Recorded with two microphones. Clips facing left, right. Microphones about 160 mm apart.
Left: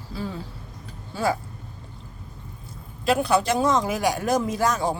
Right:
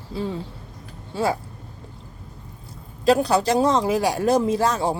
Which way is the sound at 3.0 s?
35° right (ahead or behind).